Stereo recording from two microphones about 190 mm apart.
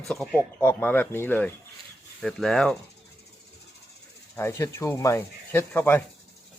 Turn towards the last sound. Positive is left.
turn(degrees=10)  # may be behind; listen again after turning